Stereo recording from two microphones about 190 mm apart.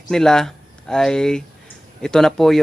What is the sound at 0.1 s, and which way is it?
Speech, 5° left (ahead or behind).